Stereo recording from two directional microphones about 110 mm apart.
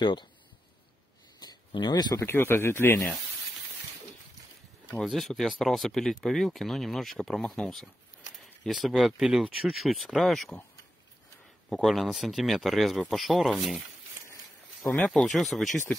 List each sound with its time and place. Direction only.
0.0 s speech: 45° left (ahead or behind)
1.4 s a sound: 40° left (ahead or behind)
2.1 s speech: 20° left (ahead or behind)
5.0 s speech: centre (ahead or behind)
11.7 s speech: centre (ahead or behind)
14.9 s speech: 10° left (ahead or behind)